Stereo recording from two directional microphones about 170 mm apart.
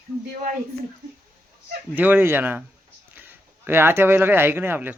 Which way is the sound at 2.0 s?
10° right (ahead or behind).